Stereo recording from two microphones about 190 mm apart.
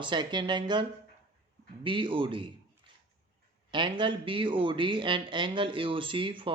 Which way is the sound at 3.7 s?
25° right (ahead or behind).